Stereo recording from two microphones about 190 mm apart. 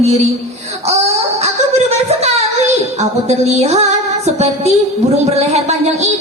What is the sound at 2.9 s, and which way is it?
Music, 35° right (ahead or behind).